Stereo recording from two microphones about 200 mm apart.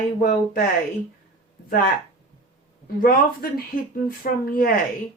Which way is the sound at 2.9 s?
45° left (ahead or behind).